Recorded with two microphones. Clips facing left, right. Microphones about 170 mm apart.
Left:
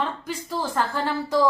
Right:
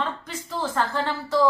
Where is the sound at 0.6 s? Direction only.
10° left (ahead or behind).